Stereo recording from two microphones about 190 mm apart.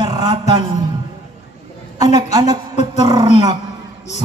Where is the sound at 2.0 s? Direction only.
20° right (ahead or behind).